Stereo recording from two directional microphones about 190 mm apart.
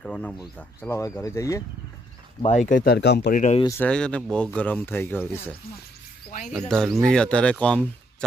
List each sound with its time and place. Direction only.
0.0 s speech: 5° left (ahead or behind)
2.4 s speech: 40° left (ahead or behind)
2.9 s speech: 60° left (ahead or behind)
3.3 s speech: 40° left (ahead or behind)
3.6 s speech: 15° left (ahead or behind)